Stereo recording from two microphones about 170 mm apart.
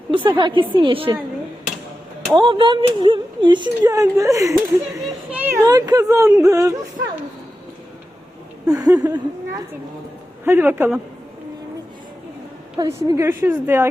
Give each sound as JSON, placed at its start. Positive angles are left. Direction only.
{"t": 0.1, "sound": "speech", "side_deg": -30}
{"t": 2.3, "sound": "speech", "side_deg": -30}
{"t": 8.6, "sound": "a sound", "side_deg": -20}
{"t": 9.0, "sound": "speech", "side_deg": -20}
{"t": 12.9, "sound": "speech", "side_deg": -15}